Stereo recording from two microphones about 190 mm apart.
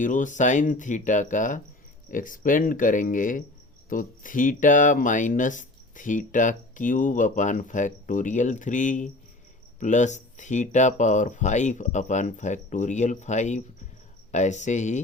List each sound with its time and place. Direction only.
0.0 s speech: 40° left (ahead or behind)